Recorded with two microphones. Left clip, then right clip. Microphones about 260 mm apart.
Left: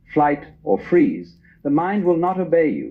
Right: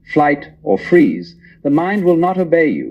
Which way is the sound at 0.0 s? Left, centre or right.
Right.